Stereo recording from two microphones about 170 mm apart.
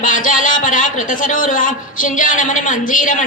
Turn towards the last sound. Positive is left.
turn(degrees=50)  # may be behind; listen again after turning